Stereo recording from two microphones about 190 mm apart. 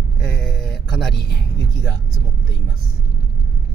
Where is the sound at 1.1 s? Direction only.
65° left (ahead or behind).